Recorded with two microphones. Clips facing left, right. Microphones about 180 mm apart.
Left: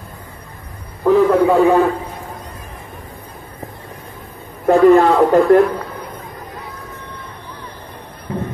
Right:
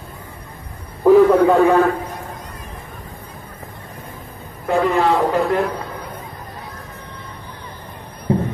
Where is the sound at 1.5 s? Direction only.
15° left (ahead or behind).